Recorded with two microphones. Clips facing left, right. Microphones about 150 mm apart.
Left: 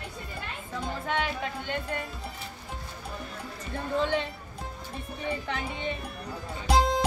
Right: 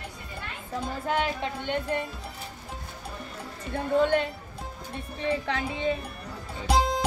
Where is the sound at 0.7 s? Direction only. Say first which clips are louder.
Right 3 dB; 35° right (ahead or behind).